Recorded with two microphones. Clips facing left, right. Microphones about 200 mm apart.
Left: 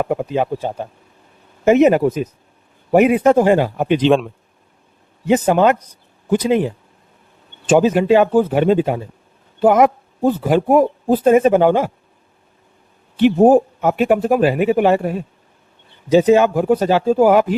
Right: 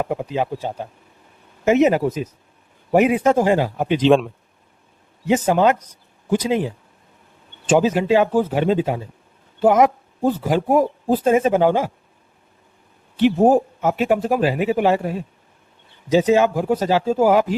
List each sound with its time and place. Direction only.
0.0 s speech: 55° left (ahead or behind)
4.0 s a man's voice: centre (ahead or behind)
5.3 s speech: 60° left (ahead or behind)
7.7 s a man's voice: 55° left (ahead or behind)
13.1 s speech: 60° left (ahead or behind)